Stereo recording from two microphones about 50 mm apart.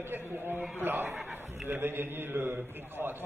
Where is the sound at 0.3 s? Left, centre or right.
Right.